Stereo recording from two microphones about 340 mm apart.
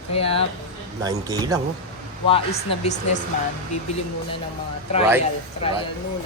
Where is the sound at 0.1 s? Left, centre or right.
Centre.